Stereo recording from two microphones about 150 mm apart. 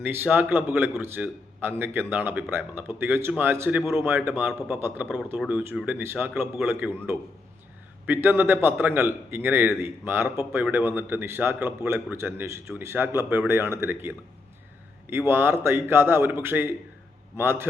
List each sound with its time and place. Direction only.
0.1 s a man's voice: 15° right (ahead or behind)
15.3 s a man's voice: 15° right (ahead or behind)